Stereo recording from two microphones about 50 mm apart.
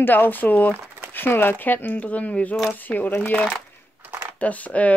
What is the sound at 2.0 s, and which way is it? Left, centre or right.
Speech, left.